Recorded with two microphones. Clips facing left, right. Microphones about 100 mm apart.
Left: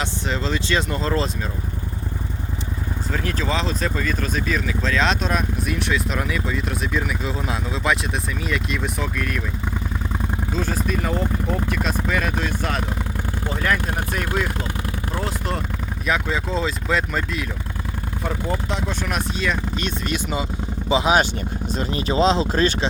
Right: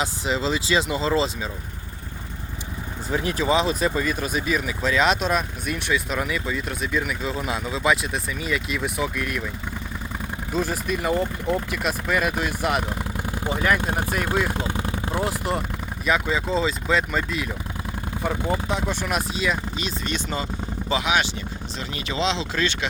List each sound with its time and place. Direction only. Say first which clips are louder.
0.0 s speech: right 1 dB; 5° right (ahead or behind)
3.1 s speech: right 3 dB; 15° right (ahead or behind)
10.5 s speech: right 1 dB; 10° right (ahead or behind)
14.6 s vehicle: right 1 dB; 20° right (ahead or behind)
15.2 s speech: right 2 dB; 10° right (ahead or behind)
20.1 s speech: left 3 dB; 10° left (ahead or behind)
21.0 s speech: left 5 dB; 35° left (ahead or behind)